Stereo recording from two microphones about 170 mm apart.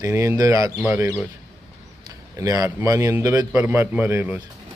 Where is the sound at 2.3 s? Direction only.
20° right (ahead or behind).